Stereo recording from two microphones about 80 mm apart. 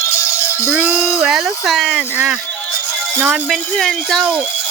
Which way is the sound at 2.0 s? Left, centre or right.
Centre.